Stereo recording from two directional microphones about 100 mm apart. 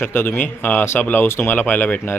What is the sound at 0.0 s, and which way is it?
Speech, 20° left (ahead or behind).